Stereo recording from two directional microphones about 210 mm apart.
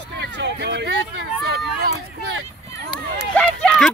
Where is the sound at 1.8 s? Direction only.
45° right (ahead or behind).